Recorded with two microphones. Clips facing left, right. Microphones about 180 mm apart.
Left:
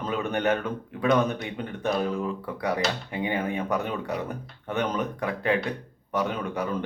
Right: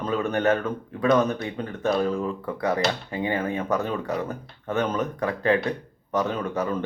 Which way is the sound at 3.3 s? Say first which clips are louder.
Right 2 dB; 15° left (ahead or behind).